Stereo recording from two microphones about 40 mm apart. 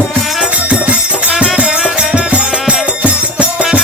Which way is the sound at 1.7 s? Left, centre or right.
Centre.